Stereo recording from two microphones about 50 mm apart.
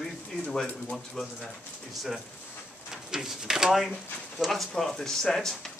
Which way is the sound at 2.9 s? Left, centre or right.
Centre.